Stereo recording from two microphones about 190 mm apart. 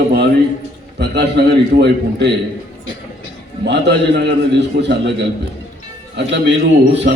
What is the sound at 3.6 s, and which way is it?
A man's voice, 65° right (ahead or behind).